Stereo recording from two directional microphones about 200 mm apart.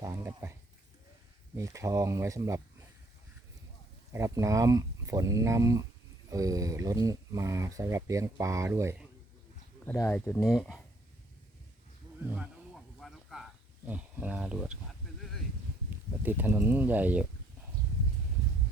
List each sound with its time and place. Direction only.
0.0 s speech: 15° right (ahead or behind)
1.5 s speech: 15° right (ahead or behind)
4.1 s speech: 15° right (ahead or behind)
9.8 s speech: 5° left (ahead or behind)
12.2 s speech: 10° right (ahead or behind)
13.0 s a sound: centre (ahead or behind)
16.2 s speech: 10° right (ahead or behind)